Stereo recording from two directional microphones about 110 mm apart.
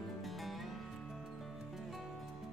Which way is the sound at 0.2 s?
Centre (ahead or behind).